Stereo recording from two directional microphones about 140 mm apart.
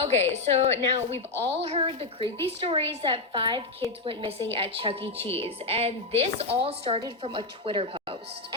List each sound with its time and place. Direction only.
0.0 s a woman's voice: 50° right (ahead or behind)